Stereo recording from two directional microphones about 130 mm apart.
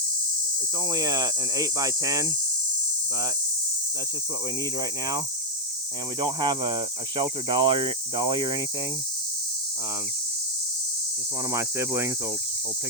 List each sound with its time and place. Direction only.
0.9 s cricket: 30° right (ahead or behind)
4.8 s cricket: 30° right (ahead or behind)
11.5 s cricket: 20° right (ahead or behind)